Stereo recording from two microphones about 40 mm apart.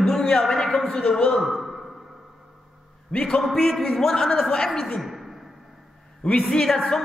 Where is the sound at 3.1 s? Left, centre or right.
Left.